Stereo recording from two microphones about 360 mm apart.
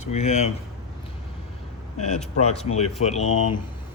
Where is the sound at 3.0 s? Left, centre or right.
Centre.